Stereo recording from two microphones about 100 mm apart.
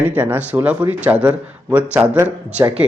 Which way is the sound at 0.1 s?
15° right (ahead or behind).